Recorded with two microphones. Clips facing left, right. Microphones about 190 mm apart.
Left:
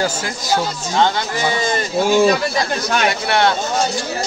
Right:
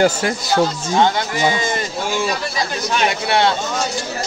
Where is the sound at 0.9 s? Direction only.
15° right (ahead or behind).